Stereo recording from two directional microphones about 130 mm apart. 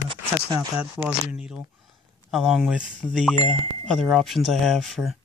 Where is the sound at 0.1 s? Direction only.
35° right (ahead or behind).